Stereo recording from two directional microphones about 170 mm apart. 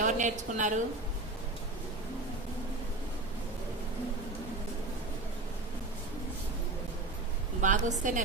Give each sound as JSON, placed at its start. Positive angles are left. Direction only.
{"t": 0.0, "sound": "a woman's voice", "side_deg": -45}
{"t": 7.6, "sound": "a woman's voice", "side_deg": -50}